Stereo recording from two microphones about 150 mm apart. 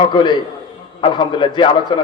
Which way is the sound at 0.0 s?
30° left (ahead or behind).